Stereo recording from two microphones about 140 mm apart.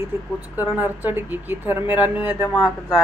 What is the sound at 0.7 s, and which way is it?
Speech, 10° right (ahead or behind).